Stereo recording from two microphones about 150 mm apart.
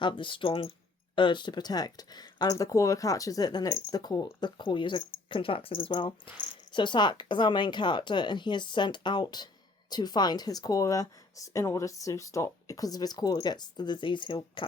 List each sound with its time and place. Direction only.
0.0 s speech: 30° left (ahead or behind)